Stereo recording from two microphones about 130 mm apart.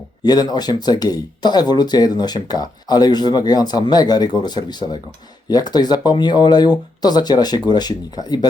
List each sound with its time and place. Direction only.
0.3 s speech: 30° left (ahead or behind)